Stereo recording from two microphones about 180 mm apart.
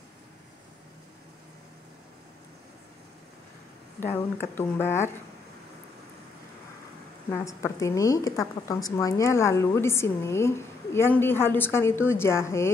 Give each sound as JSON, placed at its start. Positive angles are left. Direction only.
{"t": 4.0, "sound": "a woman's voice", "side_deg": 10}
{"t": 7.2, "sound": "a woman's voice", "side_deg": 15}